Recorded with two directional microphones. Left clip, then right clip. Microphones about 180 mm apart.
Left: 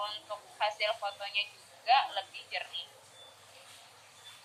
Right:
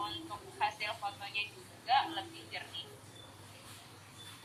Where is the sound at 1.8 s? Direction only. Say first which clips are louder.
Left 4 dB; 25° left (ahead or behind).